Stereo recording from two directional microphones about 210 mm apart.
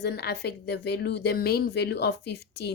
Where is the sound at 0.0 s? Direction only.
50° left (ahead or behind).